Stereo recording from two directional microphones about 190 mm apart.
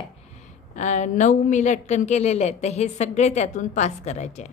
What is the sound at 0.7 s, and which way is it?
A woman's voice, 40° left (ahead or behind).